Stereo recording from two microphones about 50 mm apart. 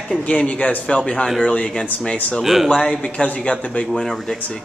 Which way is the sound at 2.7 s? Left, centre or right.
Centre.